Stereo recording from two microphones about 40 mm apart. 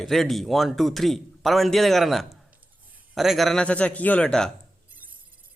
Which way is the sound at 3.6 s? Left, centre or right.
Left.